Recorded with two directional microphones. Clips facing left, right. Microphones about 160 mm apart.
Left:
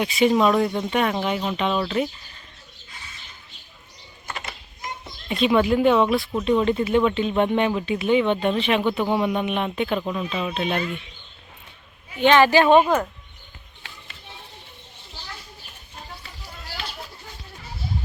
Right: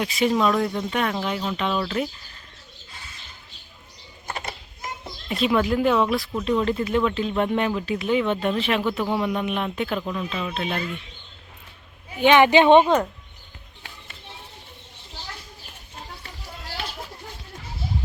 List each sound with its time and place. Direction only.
0.0 s speech: centre (ahead or behind)
5.3 s speech: centre (ahead or behind)
12.2 s a woman's voice: 15° right (ahead or behind)